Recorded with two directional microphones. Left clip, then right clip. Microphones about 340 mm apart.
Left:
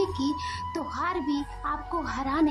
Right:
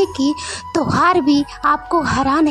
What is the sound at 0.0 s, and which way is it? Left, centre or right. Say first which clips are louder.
A woman's voice: right 10 dB; right.